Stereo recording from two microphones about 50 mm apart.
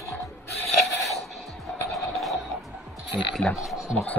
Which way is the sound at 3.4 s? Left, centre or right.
Left.